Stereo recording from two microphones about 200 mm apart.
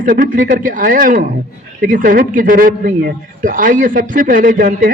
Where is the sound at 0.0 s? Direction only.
40° right (ahead or behind).